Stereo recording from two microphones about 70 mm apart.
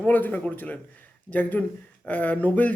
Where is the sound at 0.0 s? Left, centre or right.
Left.